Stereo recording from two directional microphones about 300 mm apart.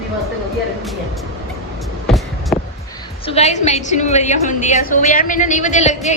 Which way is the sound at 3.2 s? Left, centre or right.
Left.